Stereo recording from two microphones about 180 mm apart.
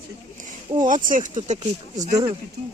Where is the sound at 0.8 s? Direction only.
50° right (ahead or behind).